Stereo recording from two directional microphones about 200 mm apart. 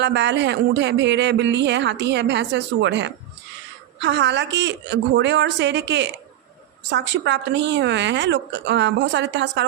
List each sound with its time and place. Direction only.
0.0 s speech: 60° right (ahead or behind)